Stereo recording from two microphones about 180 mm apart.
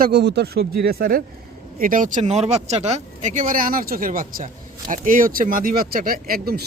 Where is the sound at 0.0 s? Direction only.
65° right (ahead or behind).